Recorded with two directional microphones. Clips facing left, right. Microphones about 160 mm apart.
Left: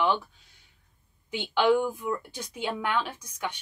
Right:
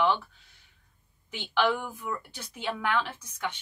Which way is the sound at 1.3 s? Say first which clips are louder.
Left 4 dB; 15° left (ahead or behind).